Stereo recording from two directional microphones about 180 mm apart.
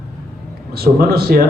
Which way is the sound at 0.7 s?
60° right (ahead or behind).